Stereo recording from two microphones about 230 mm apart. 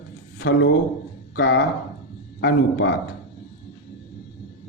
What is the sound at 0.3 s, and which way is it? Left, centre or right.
A man's voice, left.